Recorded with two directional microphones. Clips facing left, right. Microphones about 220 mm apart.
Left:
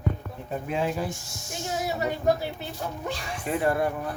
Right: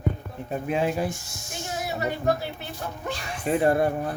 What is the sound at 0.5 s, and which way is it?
Speech, 15° right (ahead or behind).